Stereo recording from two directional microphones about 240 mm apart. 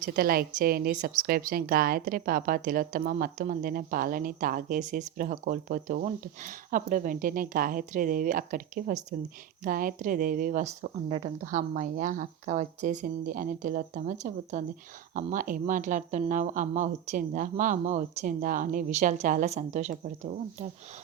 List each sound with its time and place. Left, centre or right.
0.0 s speech: right